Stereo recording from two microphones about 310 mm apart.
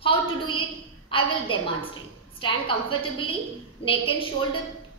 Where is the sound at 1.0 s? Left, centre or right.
Centre.